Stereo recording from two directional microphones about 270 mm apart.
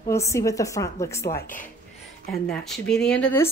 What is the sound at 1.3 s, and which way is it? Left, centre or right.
Speech, left.